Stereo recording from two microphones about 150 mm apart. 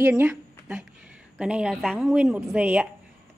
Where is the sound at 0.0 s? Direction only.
10° right (ahead or behind).